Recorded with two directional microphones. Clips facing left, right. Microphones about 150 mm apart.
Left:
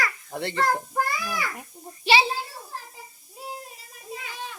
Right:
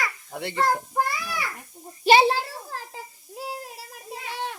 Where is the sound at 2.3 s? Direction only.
90° right.